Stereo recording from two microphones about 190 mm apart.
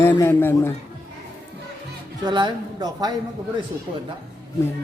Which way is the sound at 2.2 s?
25° right (ahead or behind).